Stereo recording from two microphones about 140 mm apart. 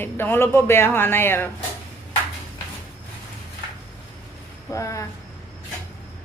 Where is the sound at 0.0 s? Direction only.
15° left (ahead or behind).